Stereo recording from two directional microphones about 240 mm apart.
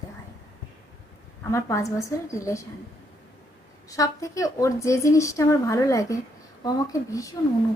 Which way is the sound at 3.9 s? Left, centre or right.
Centre.